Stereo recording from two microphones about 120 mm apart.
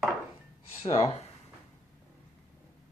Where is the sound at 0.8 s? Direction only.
55° left (ahead or behind).